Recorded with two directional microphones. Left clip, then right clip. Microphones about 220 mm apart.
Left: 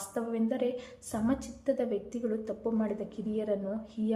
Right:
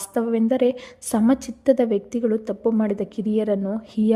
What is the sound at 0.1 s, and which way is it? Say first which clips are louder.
A woman's voice: right 12 dB; 45° right (ahead or behind).